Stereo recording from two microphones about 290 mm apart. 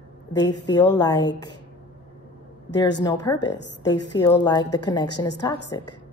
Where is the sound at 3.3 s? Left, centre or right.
Left.